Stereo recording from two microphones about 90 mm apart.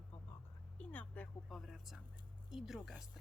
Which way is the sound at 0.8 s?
15° left (ahead or behind).